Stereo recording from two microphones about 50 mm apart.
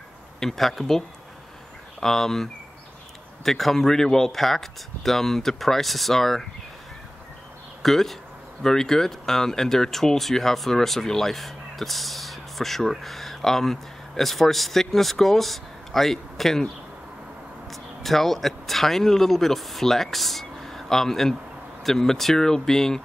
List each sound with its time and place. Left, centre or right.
0.4 s speech: centre
7.8 s speech: centre
17.6 s speech: centre